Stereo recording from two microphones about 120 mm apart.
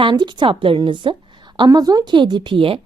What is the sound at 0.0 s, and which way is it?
A woman's voice, 40° right (ahead or behind).